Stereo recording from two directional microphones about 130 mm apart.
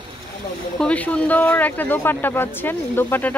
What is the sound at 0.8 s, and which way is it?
Speech, 10° left (ahead or behind).